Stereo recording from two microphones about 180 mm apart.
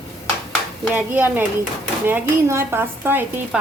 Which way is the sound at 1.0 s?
10° right (ahead or behind).